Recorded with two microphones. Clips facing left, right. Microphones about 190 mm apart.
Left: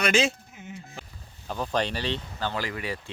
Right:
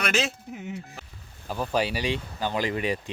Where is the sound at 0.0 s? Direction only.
Centre (ahead or behind).